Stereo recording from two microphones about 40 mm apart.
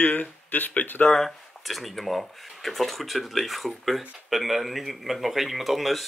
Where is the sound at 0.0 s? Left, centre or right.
Left.